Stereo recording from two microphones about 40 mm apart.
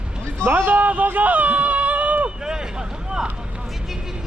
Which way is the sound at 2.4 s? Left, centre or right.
Centre.